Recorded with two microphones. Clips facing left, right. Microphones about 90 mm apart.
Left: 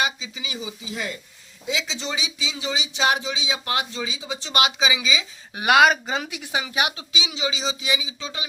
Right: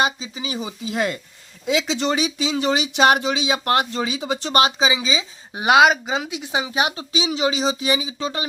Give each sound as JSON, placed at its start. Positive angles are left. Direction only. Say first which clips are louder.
{"t": 0.0, "sound": "a woman's voice", "louder": "right 4 dB", "side_deg": -40}
{"t": 0.9, "sound": "speech", "louder": "right 11 dB", "side_deg": -65}
{"t": 4.6, "sound": "a woman's voice", "louder": "right 3 dB", "side_deg": -35}